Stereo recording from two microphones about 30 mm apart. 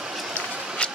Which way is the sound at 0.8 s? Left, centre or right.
Left.